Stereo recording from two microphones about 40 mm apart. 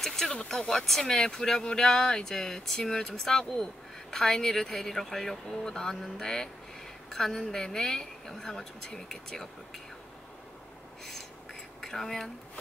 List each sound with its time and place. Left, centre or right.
0.0 s a sound: centre
0.5 s speech: centre
11.8 s speech: centre